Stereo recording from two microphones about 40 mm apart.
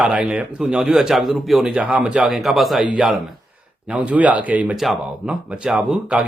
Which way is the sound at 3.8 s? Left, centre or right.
Right.